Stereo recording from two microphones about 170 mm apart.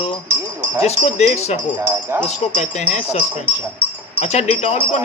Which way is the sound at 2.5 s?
40° left (ahead or behind).